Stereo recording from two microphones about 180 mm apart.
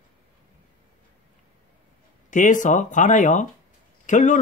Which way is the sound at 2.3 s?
45° left (ahead or behind).